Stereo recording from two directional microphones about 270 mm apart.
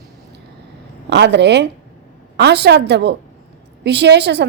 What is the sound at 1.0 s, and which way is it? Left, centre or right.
A woman's voice, right.